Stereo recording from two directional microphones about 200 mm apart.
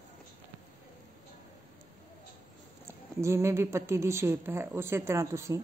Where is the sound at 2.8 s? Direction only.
15° right (ahead or behind).